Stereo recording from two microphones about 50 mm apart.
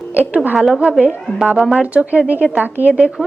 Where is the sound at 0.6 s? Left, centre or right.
Centre.